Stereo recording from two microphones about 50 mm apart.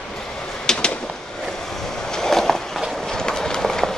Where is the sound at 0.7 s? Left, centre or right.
Centre.